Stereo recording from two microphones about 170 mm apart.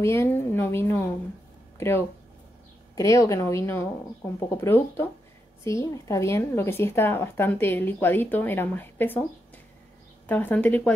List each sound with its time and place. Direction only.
0.0 s speech: 15° left (ahead or behind)
10.2 s speech: 10° left (ahead or behind)